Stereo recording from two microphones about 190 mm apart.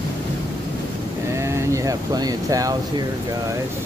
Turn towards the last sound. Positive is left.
turn(degrees=-20)  # may be behind; listen again after turning